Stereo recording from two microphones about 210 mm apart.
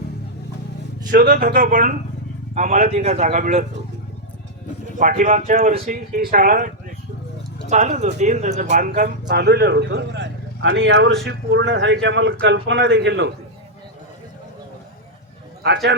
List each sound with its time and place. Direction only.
1.0 s speech: 40° right (ahead or behind)
4.9 s speech: 40° right (ahead or behind)
7.7 s speech: 35° right (ahead or behind)
8.7 s speech: 45° right (ahead or behind)
15.6 s speech: 55° right (ahead or behind)